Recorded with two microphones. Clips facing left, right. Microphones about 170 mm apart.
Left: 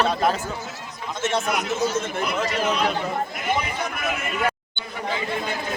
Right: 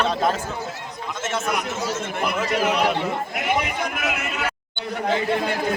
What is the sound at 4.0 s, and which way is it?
Speech, 75° right (ahead or behind).